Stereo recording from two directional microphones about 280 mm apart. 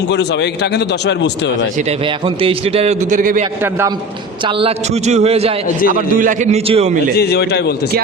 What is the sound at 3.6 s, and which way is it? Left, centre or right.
Speech, centre.